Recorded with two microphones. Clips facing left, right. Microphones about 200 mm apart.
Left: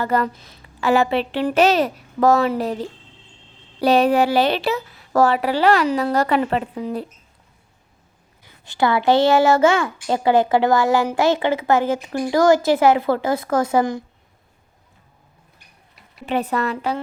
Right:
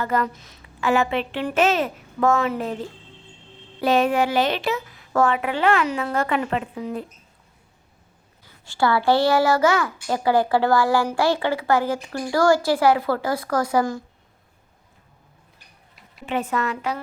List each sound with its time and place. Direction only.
0.0 s speech: 35° left (ahead or behind)
8.6 s a woman's voice: 20° left (ahead or behind)
16.2 s speech: 35° left (ahead or behind)